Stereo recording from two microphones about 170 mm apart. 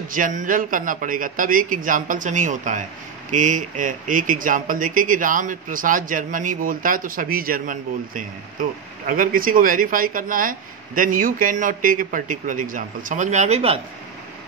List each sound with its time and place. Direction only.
0.1 s speech: 50° right (ahead or behind)